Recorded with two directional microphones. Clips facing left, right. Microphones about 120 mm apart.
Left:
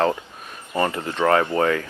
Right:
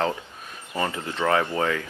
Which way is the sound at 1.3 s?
55° left (ahead or behind).